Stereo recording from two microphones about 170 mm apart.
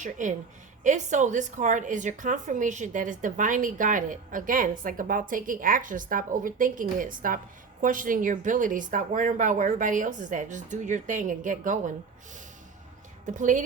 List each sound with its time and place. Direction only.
0.0 s a woman's voice: 50° right (ahead or behind)
13.2 s a woman's voice: 50° right (ahead or behind)